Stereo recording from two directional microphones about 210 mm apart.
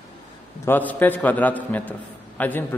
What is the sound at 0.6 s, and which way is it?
A man's voice, 10° left (ahead or behind).